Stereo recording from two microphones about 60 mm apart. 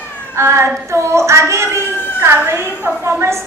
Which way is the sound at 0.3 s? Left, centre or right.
Right.